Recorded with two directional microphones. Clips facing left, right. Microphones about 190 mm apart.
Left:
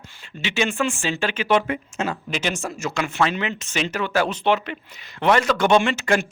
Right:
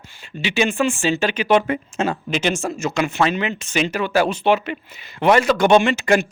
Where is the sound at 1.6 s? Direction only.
30° right (ahead or behind).